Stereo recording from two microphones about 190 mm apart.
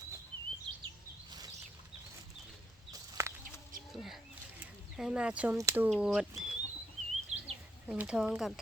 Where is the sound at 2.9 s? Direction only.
15° right (ahead or behind).